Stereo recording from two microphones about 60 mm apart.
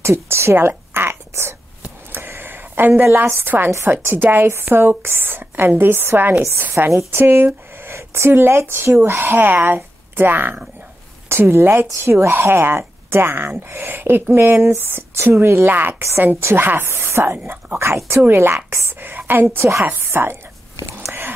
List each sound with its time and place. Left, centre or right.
0.0 s a woman's voice: right
2.1 s a sound: right
3.3 s a woman's voice: right
9.2 s a woman's voice: right
11.2 s a woman's voice: right
15.7 s a woman's voice: right
16.0 s a woman's voice: right